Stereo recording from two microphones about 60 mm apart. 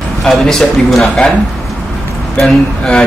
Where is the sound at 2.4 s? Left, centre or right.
Centre.